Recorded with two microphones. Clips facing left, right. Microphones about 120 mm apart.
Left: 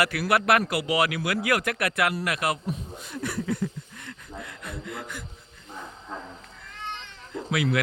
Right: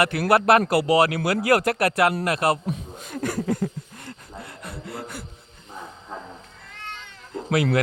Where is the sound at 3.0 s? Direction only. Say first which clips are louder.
Right 4 dB; 45° right (ahead or behind).